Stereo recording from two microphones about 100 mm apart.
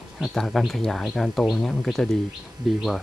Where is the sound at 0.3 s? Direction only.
5° left (ahead or behind).